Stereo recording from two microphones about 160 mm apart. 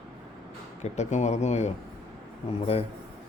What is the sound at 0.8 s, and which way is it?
Speech, 45° left (ahead or behind).